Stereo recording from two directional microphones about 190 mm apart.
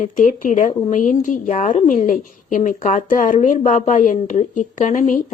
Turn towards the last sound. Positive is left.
turn(degrees=40)  # may be behind; listen again after turning